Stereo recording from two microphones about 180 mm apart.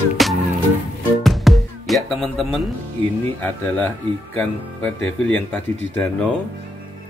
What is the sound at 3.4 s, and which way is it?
Speech, 10° left (ahead or behind).